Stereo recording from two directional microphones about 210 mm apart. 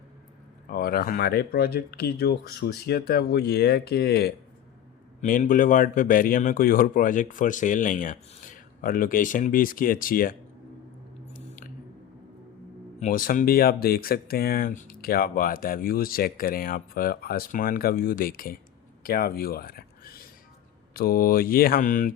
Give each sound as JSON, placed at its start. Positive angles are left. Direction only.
{"t": 0.7, "sound": "speech", "side_deg": 45}
{"t": 11.3, "sound": "squish", "side_deg": 40}
{"t": 13.0, "sound": "speech", "side_deg": 40}